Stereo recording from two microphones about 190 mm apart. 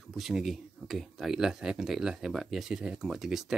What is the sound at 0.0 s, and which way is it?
Speech, centre (ahead or behind).